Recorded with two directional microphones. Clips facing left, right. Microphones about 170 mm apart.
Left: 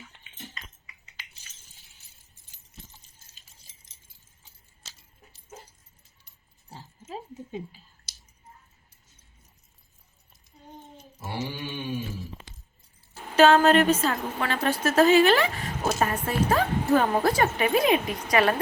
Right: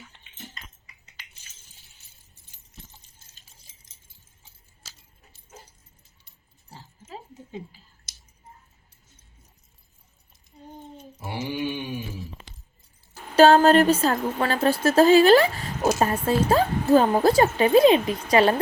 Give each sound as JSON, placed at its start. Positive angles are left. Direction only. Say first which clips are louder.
{"t": 11.2, "sound": "mantra", "louder": "right 4 dB", "side_deg": -15}
{"t": 13.3, "sound": "a woman's voice", "louder": "right 3 dB", "side_deg": -35}